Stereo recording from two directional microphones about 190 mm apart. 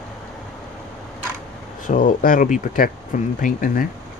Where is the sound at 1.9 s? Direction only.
45° left (ahead or behind).